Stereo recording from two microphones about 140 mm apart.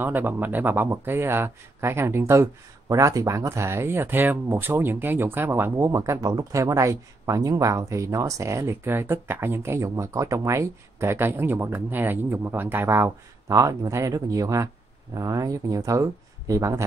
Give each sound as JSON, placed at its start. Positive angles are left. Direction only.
{"t": 0.0, "sound": "speech", "side_deg": -15}